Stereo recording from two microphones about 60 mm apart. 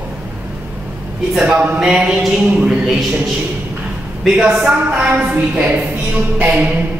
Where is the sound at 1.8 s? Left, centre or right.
Centre.